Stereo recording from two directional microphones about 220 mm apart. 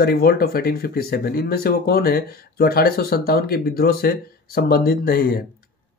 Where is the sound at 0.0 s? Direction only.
45° left (ahead or behind).